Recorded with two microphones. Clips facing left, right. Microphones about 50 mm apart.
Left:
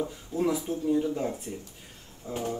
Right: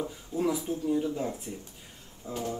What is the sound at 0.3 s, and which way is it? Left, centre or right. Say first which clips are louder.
Speech: left 2 dB; left.